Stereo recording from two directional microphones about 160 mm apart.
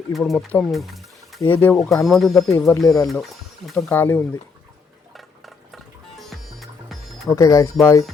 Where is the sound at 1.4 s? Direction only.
15° left (ahead or behind).